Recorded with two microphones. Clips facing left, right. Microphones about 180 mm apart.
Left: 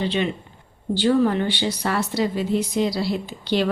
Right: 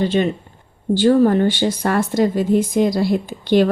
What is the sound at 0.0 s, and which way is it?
A woman's voice, 45° right (ahead or behind).